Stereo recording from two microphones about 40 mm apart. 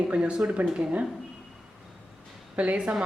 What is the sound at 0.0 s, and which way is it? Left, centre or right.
Speech, right.